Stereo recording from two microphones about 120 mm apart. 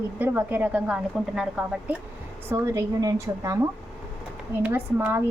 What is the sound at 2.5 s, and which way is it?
Speech, 25° right (ahead or behind).